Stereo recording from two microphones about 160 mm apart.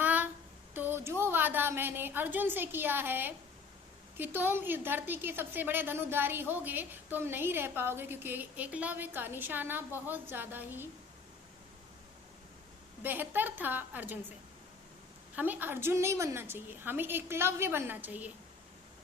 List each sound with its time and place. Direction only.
0.0 s a sound: 10° right (ahead or behind)
0.7 s a woman's voice: 15° right (ahead or behind)
13.0 s a woman's voice: 10° right (ahead or behind)
15.4 s a woman's voice: 10° right (ahead or behind)